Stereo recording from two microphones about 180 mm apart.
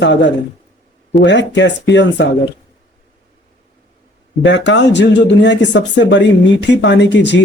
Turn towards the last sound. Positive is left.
turn(degrees=75)  # may be behind; listen again after turning